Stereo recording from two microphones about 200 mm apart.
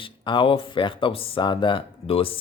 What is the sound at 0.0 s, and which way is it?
Speech, 25° left (ahead or behind).